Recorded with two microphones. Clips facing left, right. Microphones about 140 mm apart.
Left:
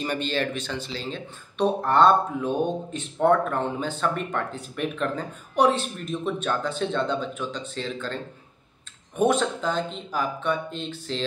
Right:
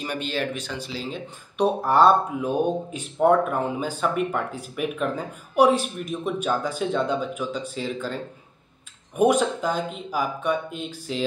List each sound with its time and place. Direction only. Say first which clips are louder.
0.0 s speech: left 1 dB; 5° right (ahead or behind)